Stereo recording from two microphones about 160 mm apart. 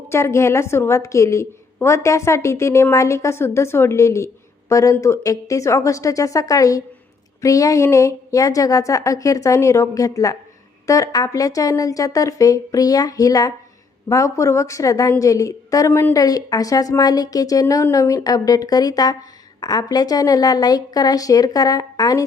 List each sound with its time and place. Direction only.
0.1 s a woman's voice: 15° left (ahead or behind)